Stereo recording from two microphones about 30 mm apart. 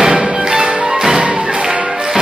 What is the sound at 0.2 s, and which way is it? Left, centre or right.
Music, right.